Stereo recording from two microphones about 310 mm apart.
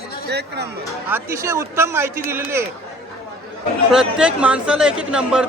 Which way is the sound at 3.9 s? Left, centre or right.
Centre.